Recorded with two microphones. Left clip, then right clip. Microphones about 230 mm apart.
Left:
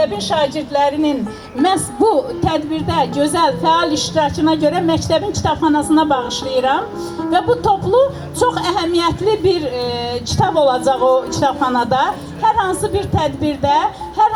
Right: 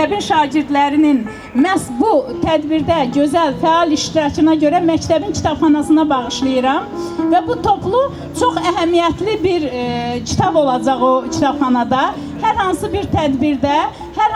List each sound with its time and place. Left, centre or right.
0.3 s a woman's voice: right